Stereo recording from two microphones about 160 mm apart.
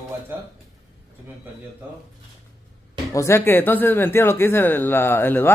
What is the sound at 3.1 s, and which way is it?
Speech, 15° left (ahead or behind).